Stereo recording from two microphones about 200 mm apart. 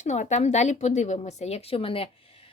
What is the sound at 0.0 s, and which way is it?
Speech, 35° left (ahead or behind).